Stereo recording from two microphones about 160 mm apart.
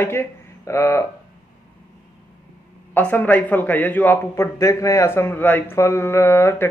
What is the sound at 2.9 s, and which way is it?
A man's voice, 10° left (ahead or behind).